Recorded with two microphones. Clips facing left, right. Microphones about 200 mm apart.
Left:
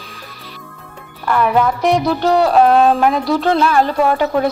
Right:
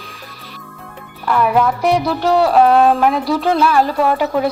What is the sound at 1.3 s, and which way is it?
Speech, 5° right (ahead or behind).